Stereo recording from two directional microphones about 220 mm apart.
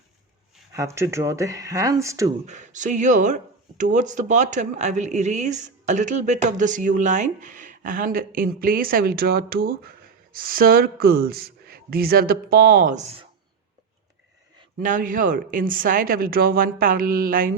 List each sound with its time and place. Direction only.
0.7 s speech: 15° right (ahead or behind)
2.5 s speech: 35° right (ahead or behind)
14.8 s speech: 35° right (ahead or behind)